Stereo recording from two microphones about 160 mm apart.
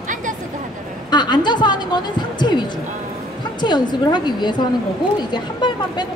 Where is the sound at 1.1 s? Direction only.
25° left (ahead or behind).